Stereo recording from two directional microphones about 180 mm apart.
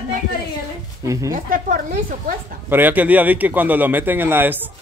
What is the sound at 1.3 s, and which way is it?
Speech, 50° right (ahead or behind).